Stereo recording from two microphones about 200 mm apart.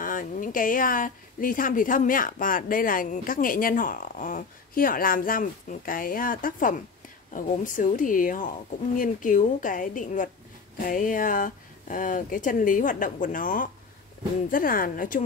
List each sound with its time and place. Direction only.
0.0 s a woman's voice: 45° left (ahead or behind)